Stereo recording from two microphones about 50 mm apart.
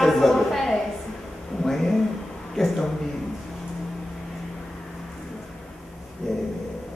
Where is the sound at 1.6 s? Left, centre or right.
Centre.